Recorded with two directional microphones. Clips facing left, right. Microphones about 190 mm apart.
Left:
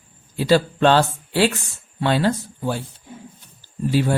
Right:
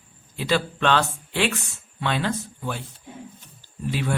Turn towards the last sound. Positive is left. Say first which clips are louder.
# left 7 dB
turn(degrees=35)  # may be behind; listen again after turning